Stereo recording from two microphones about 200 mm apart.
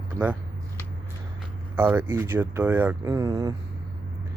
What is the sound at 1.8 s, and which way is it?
Speech, 10° right (ahead or behind).